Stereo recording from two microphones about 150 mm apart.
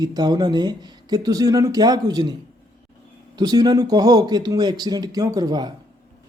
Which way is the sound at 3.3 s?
25° right (ahead or behind).